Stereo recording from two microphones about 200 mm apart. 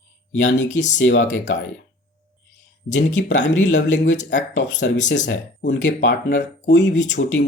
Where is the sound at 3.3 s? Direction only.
35° left (ahead or behind).